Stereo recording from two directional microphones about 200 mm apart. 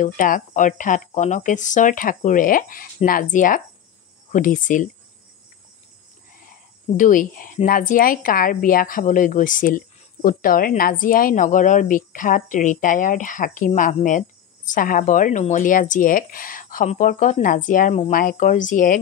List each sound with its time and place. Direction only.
0.0 s speech: 40° left (ahead or behind)
7.0 s speech: 40° left (ahead or behind)